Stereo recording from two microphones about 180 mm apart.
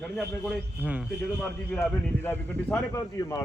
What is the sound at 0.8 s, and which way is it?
Speech, 5° right (ahead or behind).